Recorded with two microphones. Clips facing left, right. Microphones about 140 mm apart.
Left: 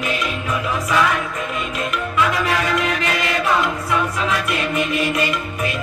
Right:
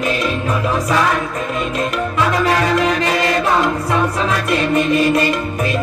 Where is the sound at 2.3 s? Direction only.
35° right (ahead or behind).